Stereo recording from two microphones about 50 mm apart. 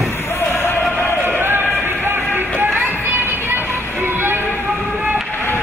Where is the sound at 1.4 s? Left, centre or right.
Right.